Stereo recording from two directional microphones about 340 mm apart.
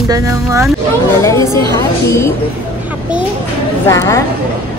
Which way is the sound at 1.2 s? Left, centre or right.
Centre.